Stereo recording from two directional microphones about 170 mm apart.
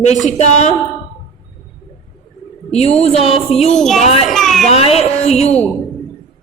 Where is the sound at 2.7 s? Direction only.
40° left (ahead or behind).